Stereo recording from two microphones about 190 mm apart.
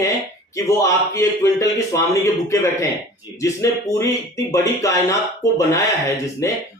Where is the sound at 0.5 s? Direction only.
15° left (ahead or behind).